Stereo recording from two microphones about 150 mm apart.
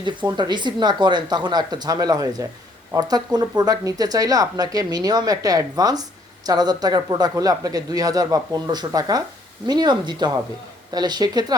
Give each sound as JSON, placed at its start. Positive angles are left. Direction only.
{"t": 0.3, "sound": "speech", "side_deg": -30}